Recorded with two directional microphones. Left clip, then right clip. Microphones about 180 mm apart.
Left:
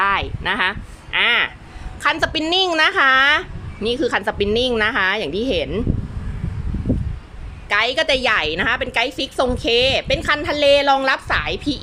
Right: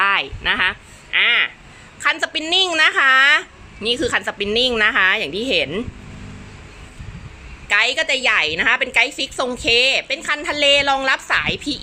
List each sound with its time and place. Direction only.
0.0 s a woman's voice: 15° left (ahead or behind)
7.7 s a woman's voice: 10° left (ahead or behind)